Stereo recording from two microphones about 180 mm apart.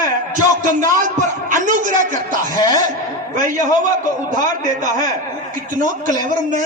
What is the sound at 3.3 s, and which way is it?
A man's voice, 45° right (ahead or behind).